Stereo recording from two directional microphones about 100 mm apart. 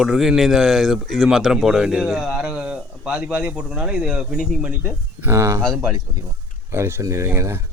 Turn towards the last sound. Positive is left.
turn(degrees=-25)  # may be behind; listen again after turning